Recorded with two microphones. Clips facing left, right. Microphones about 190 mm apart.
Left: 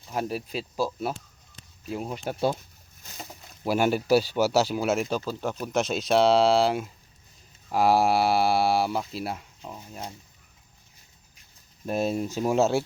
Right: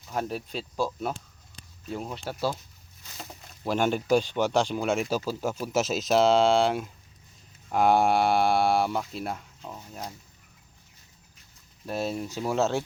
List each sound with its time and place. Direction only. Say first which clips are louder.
0.1 s speech: left 1 dB; 5° left (ahead or behind); by 2.6 s 20° left (ahead or behind)
3.2 s speech: left 1 dB; 10° left (ahead or behind)
11.9 s speech: left 4 dB; 20° left (ahead or behind)